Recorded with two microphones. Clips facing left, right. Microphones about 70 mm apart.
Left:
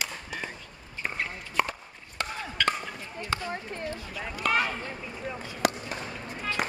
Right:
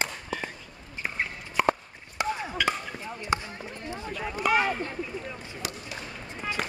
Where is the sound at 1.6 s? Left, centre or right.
Centre.